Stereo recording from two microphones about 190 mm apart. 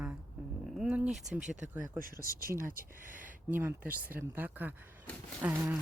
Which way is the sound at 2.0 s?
50° right (ahead or behind).